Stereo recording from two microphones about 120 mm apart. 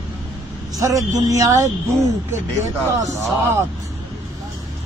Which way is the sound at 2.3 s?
90° right.